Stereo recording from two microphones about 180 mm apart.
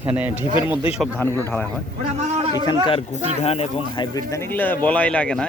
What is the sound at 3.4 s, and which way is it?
Speech, 35° left (ahead or behind).